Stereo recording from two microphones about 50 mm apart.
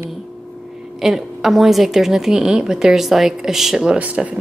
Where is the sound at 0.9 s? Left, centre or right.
Centre.